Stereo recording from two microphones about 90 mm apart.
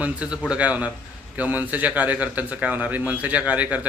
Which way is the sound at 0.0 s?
10° right (ahead or behind).